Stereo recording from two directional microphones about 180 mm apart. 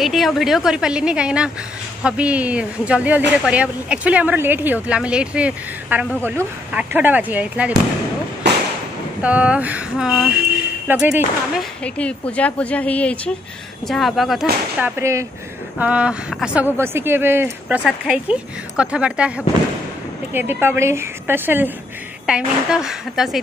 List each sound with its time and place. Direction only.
0.0 s speech: centre (ahead or behind)
9.2 s speech: 5° right (ahead or behind)
11.5 s a woman's voice: 5° left (ahead or behind)
14.8 s speech: 15° right (ahead or behind)